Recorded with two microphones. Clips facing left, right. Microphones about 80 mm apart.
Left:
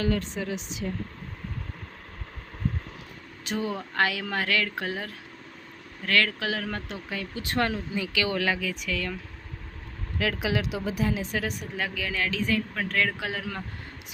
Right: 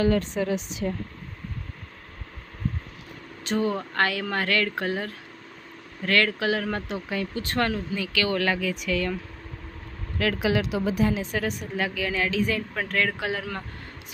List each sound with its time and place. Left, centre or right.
0.2 s a woman's voice: right
3.4 s a woman's voice: centre
7.4 s a woman's voice: centre
10.2 s a woman's voice: centre